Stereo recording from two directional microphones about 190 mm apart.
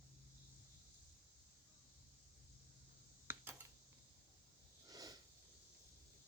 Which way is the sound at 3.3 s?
10° right (ahead or behind).